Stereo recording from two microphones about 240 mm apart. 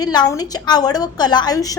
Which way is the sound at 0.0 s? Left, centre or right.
Centre.